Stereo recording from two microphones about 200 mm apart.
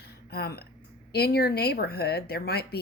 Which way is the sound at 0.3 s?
50° left (ahead or behind).